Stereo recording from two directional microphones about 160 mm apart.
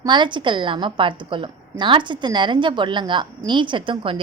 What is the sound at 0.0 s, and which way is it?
A woman's voice, 30° right (ahead or behind).